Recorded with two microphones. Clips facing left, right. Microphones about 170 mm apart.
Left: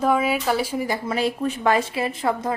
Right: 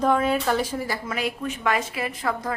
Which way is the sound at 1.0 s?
30° left (ahead or behind).